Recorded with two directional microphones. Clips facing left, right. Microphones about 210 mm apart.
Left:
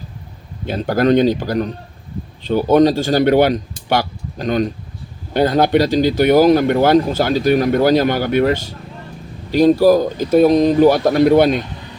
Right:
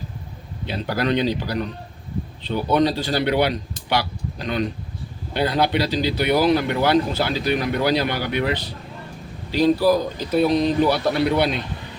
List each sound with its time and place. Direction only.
0.6 s speech: 45° left (ahead or behind)